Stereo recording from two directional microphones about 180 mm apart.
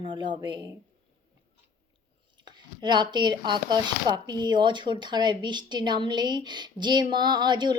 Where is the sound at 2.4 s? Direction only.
25° right (ahead or behind).